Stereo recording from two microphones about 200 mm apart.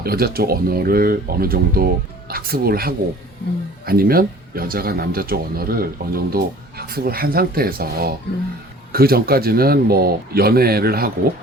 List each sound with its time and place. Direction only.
0.0 s speech: 50° right (ahead or behind)